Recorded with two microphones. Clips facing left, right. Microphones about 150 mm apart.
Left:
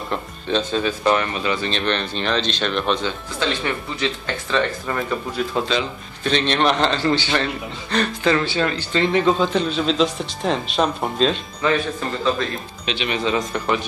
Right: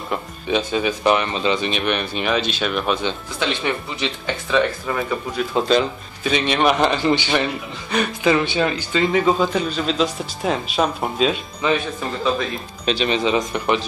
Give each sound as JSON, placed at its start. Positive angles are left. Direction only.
{"t": 0.1, "sound": "a man's voice", "side_deg": -10}
{"t": 3.1, "sound": "a man's voice", "side_deg": -15}
{"t": 12.8, "sound": "speech", "side_deg": -40}
{"t": 13.1, "sound": "speech", "side_deg": -20}